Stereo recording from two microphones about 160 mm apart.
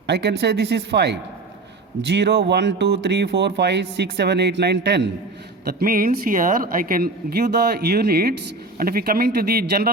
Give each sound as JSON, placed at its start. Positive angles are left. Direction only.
{"t": 0.1, "sound": "speech", "side_deg": -90}
{"t": 5.6, "sound": "speech", "side_deg": -65}